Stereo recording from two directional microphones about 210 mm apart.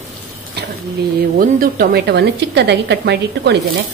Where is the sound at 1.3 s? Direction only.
45° right (ahead or behind).